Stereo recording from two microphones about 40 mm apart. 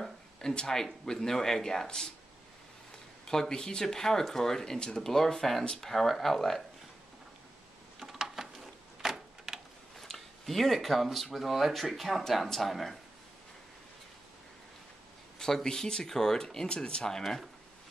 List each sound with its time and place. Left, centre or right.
0.4 s speech: centre
3.3 s speech: centre
8.1 s a sound: centre
9.9 s a sound: centre
11.3 s speech: centre
15.3 s speech: centre